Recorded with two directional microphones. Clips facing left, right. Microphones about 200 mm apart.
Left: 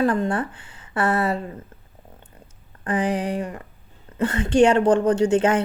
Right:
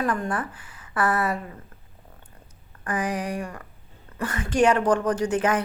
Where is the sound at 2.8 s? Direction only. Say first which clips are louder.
Left 4 dB; 25° left (ahead or behind).